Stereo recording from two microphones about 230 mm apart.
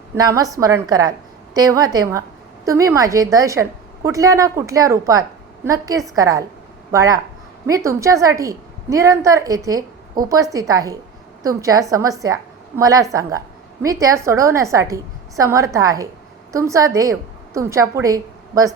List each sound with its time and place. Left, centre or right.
0.2 s a woman's voice: centre